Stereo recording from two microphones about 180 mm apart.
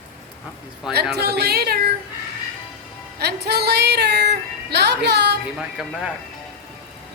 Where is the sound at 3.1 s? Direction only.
65° right (ahead or behind).